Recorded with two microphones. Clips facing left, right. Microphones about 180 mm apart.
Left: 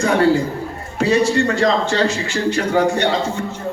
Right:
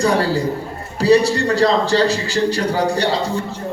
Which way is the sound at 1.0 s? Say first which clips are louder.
Right 2 dB; 35° right (ahead or behind).